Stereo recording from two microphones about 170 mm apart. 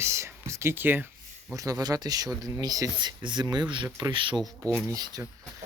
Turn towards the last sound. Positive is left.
turn(degrees=-20)  # may be behind; listen again after turning